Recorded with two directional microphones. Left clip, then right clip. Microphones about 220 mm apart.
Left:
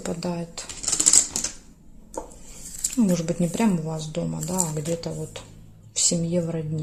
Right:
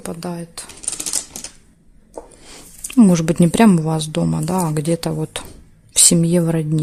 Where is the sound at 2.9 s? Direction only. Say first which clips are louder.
Right 10 dB; 50° right (ahead or behind).